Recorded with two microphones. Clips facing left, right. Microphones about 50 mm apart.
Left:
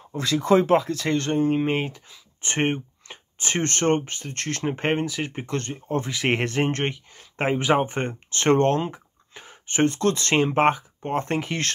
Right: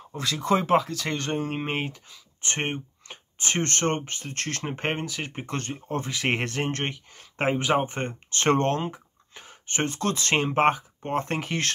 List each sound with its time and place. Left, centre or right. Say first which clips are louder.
0.1 s speech: left 5 dB; centre
2.4 s speech: left 5 dB; centre
3.1 s speech: left 1 dB; centre
5.5 s speech: left 1 dB; centre
5.9 s speech: left 3 dB; centre
8.3 s a sound: left 3 dB; centre
9.8 s speech: left 4 dB; centre